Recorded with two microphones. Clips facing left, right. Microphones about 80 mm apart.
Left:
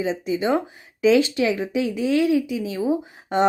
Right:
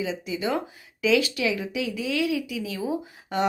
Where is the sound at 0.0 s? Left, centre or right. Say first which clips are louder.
Left 5 dB; left.